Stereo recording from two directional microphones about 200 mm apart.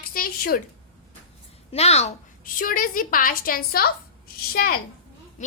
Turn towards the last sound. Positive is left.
turn(degrees=50)  # may be behind; listen again after turning